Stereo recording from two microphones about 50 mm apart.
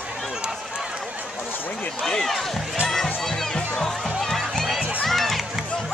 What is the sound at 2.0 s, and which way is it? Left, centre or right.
Speech, centre.